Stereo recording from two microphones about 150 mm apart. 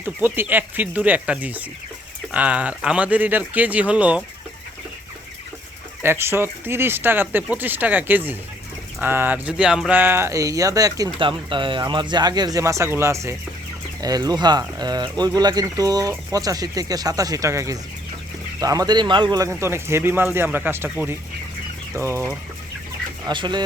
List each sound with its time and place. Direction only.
0.0 s speech: 15° right (ahead or behind)
6.0 s speech: 15° right (ahead or behind)
10.0 s speech: 15° right (ahead or behind)
19.5 s speech: 15° right (ahead or behind)
23.3 s speech: 30° right (ahead or behind)